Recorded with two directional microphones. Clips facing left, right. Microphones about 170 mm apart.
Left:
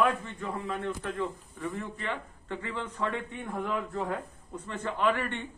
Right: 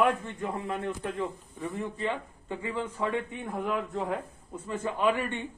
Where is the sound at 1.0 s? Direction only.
15° right (ahead or behind).